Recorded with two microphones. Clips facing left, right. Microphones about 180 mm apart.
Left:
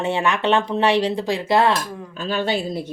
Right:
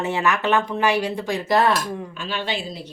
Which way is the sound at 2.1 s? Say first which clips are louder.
Left 10 dB; 40° left (ahead or behind).